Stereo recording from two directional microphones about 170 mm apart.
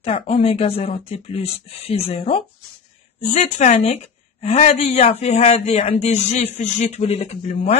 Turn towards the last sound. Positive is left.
turn(degrees=40)  # may be behind; listen again after turning